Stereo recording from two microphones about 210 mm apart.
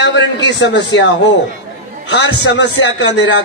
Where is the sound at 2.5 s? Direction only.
60° left (ahead or behind).